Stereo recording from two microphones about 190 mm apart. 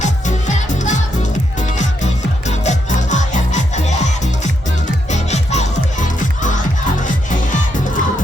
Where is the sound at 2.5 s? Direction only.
40° left (ahead or behind).